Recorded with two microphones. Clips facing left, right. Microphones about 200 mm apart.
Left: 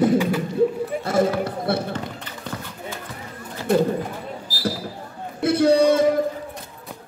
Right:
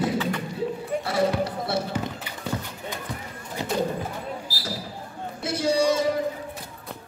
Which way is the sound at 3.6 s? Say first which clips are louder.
Left 8 dB; 20° right (ahead or behind).